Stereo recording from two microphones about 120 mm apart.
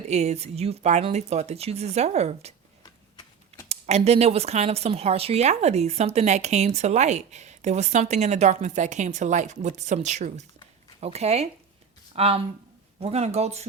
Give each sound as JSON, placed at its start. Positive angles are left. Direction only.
{"t": 0.1, "sound": "speech", "side_deg": -70}
{"t": 3.7, "sound": "speech", "side_deg": -65}
{"t": 11.0, "sound": "speech", "side_deg": -60}